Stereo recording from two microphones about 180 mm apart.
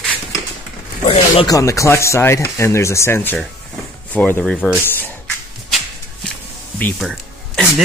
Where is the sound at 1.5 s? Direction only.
15° left (ahead or behind).